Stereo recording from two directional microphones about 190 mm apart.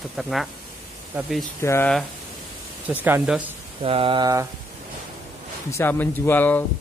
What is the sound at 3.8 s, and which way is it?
Speech, 30° right (ahead or behind).